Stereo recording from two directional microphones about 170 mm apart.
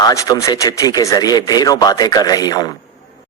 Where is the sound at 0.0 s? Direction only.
20° left (ahead or behind).